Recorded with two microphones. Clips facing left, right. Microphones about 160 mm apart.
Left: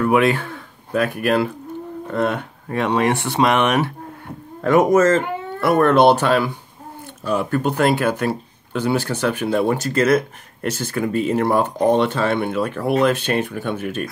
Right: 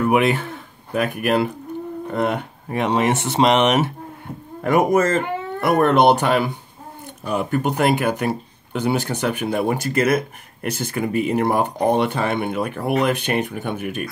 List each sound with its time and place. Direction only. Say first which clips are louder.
0.0 s speech: left 1 dB; 20° right (ahead or behind)